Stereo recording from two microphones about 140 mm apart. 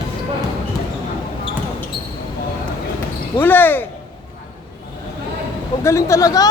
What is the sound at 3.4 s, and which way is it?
Basketball bounce, 15° left (ahead or behind).